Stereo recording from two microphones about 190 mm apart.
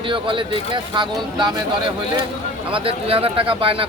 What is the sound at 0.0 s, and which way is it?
Speech, 25° right (ahead or behind).